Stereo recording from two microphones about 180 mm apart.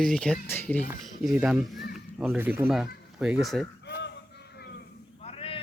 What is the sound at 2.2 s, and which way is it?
Speech, 10° right (ahead or behind).